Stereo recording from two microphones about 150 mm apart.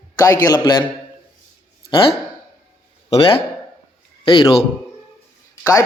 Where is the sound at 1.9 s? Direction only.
35° left (ahead or behind).